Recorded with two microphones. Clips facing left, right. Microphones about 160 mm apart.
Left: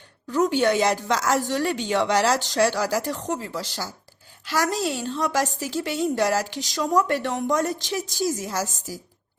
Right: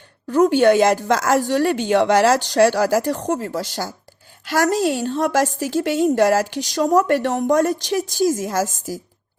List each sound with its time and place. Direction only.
0.3 s a woman's voice: 45° right (ahead or behind)